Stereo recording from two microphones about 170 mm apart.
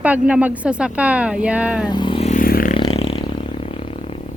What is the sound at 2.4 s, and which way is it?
Scrape, 55° left (ahead or behind).